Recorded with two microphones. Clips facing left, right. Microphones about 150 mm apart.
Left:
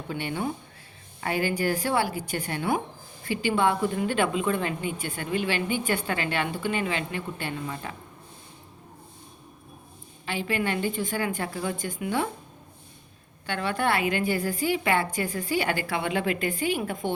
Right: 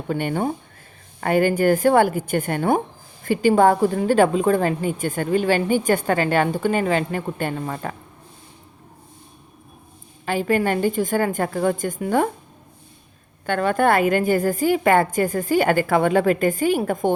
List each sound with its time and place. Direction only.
0.1 s a woman's voice: 50° right (ahead or behind)
10.2 s a woman's voice: 45° right (ahead or behind)
13.4 s a woman's voice: 45° right (ahead or behind)